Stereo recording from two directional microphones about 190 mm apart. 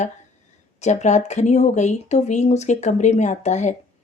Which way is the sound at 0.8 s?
35° left (ahead or behind).